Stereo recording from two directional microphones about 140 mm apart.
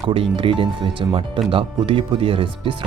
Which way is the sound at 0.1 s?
40° right (ahead or behind).